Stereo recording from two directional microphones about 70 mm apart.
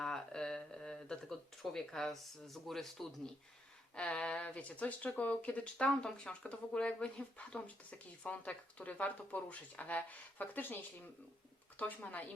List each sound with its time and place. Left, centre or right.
0.0 s a sound: centre
3.9 s speech: centre
11.8 s speech: left